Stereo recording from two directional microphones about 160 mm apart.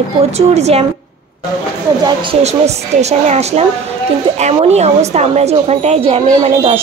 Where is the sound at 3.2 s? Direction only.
45° right (ahead or behind).